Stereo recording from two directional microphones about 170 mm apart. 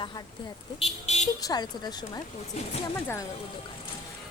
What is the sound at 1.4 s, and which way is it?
Speech, 25° left (ahead or behind).